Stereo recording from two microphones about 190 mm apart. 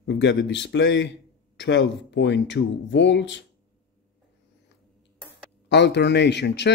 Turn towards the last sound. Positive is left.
turn(degrees=65)  # may be behind; listen again after turning